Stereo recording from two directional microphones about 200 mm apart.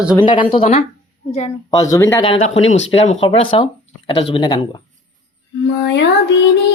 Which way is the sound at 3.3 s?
25° left (ahead or behind).